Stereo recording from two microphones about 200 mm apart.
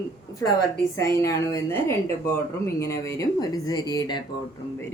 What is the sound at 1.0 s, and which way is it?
Speech, 15° left (ahead or behind).